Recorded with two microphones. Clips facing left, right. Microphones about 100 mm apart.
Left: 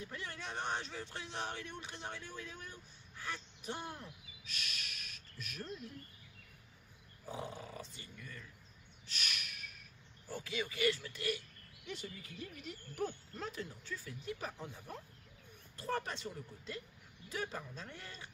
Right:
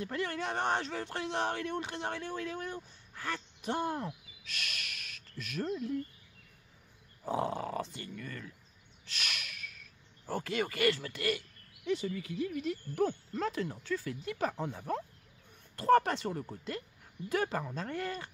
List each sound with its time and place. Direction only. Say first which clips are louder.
0.0 s speech: right 10 dB; 70° right (ahead or behind); by 5.8 s 90° right
7.2 s speech: right 11 dB; 70° right (ahead or behind)
9.0 s a sound: right 4 dB; 90° right
10.2 s speech: right 7 dB; 60° right (ahead or behind); by 15.0 s 85° right
15.7 s speech: right 14 dB; 70° right (ahead or behind)